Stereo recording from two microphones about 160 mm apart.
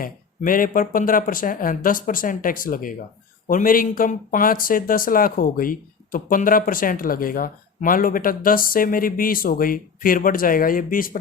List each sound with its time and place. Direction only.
0.0 s speech: 60° left (ahead or behind)